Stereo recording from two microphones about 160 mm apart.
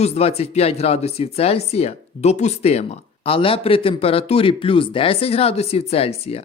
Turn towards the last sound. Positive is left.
turn(degrees=40)  # may be behind; listen again after turning